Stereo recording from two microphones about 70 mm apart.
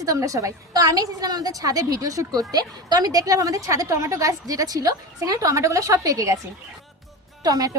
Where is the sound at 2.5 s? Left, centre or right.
Right.